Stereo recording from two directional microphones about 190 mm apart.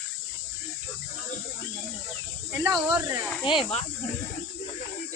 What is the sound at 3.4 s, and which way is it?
Speech, 25° left (ahead or behind).